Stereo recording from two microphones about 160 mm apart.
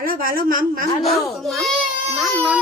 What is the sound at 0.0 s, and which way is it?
Speech, 65° right (ahead or behind).